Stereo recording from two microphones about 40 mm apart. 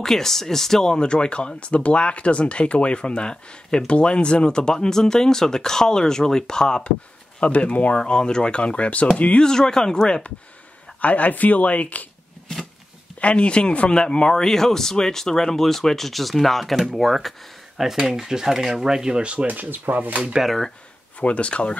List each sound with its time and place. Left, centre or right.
0.0 s speech: centre
7.3 s speech: left
8.0 s speech: left
9.4 s speech: centre
11.0 s speech: left
13.2 s speech: left
13.9 s speech: centre
19.4 s speech: right
20.4 s speech: centre
21.2 s speech: left